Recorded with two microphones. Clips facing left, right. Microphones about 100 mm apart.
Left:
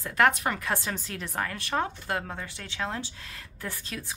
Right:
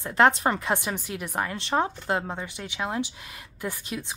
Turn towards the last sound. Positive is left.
turn(degrees=-20)  # may be behind; listen again after turning